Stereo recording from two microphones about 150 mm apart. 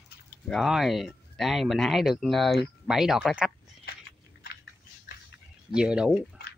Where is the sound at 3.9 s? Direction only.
90° left.